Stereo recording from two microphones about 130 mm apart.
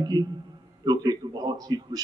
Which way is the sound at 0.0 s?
30° right (ahead or behind).